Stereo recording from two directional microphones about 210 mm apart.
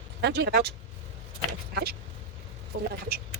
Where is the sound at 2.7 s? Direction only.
50° right (ahead or behind).